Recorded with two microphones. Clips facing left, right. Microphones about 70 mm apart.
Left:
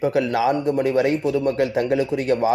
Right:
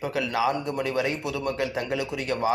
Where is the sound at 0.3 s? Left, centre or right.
Left.